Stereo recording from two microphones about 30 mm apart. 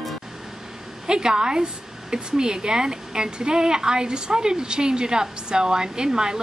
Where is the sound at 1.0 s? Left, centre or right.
Right.